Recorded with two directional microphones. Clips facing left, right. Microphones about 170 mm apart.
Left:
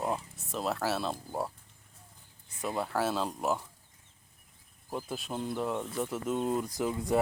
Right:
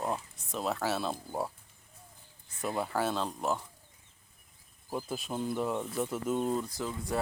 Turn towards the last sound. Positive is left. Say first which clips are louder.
# left 5 dB
turn(degrees=20)  # may be behind; listen again after turning